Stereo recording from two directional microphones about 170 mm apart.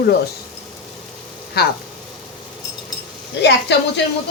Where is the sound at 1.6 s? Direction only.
70° left (ahead or behind).